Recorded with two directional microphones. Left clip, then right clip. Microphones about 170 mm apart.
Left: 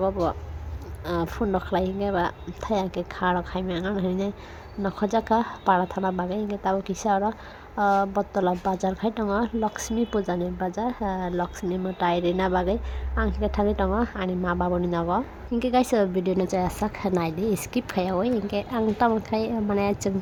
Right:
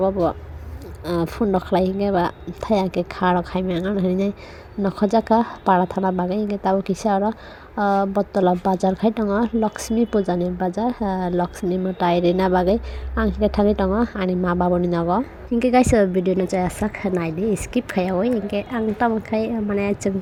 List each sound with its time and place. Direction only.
0.0 s a woman's voice: 15° right (ahead or behind)